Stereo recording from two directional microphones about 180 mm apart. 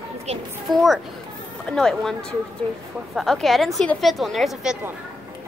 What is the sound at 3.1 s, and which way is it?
A woman's voice, centre (ahead or behind).